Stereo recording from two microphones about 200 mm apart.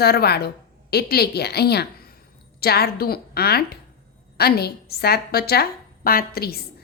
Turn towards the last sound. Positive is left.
turn(degrees=50)  # may be behind; listen again after turning